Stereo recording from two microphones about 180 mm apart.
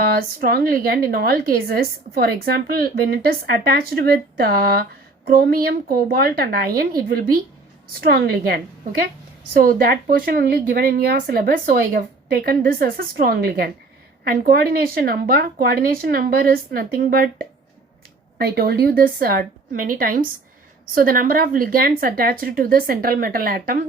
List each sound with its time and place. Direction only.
0.1 s a woman's voice: 55° right (ahead or behind)
8.0 s a woman's voice: 60° right (ahead or behind)